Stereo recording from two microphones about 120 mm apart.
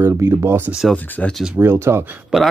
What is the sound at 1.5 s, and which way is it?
Speech, 20° right (ahead or behind).